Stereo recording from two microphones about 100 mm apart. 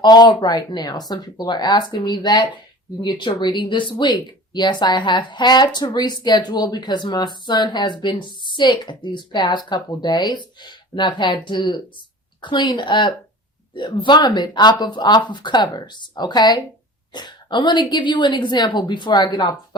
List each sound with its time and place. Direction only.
0.0 s speech: 45° left (ahead or behind)